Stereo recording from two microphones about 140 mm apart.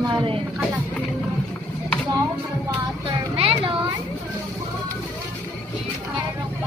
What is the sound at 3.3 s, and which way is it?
Speech, 40° right (ahead or behind).